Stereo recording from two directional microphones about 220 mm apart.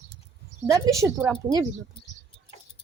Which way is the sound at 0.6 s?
15° right (ahead or behind).